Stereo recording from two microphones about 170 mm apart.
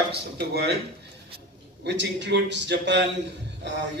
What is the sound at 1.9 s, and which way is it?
Speech, 90° right.